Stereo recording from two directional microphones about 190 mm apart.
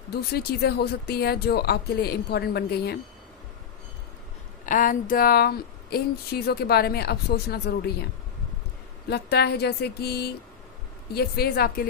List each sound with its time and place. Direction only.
0.1 s speech: 55° left (ahead or behind)
4.6 s speech: 45° left (ahead or behind)
9.0 s speech: 60° left (ahead or behind)